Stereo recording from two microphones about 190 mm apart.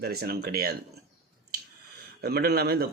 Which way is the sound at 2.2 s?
55° right (ahead or behind).